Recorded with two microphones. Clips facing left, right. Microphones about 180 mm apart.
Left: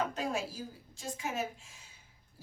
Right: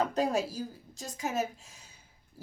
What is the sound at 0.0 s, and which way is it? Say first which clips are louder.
A woman's voice: right 6 dB; 40° right (ahead or behind).